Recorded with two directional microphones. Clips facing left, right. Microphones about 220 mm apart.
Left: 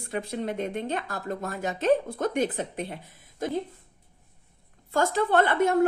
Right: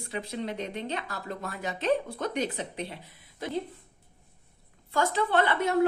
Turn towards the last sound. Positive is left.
turn(degrees=50)  # may be behind; listen again after turning